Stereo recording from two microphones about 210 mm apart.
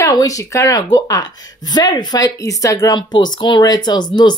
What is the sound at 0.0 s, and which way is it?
A woman's voice, 15° left (ahead or behind).